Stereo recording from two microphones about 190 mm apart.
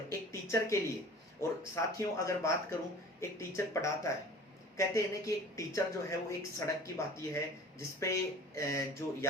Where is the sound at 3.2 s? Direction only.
15° left (ahead or behind).